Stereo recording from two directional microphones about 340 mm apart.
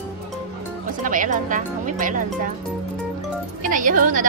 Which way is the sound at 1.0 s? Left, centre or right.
Right.